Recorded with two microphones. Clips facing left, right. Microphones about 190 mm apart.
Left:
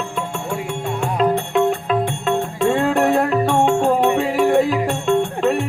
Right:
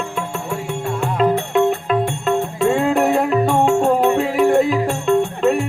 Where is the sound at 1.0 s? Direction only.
Centre (ahead or behind).